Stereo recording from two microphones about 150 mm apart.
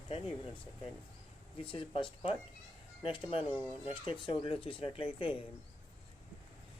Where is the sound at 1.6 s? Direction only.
35° left (ahead or behind).